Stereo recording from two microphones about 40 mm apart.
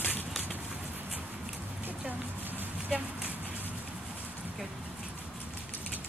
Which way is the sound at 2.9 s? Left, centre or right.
Right.